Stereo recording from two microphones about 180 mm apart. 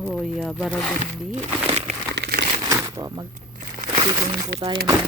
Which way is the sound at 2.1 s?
65° right (ahead or behind).